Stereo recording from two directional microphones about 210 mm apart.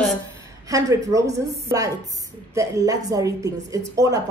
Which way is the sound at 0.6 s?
15° right (ahead or behind).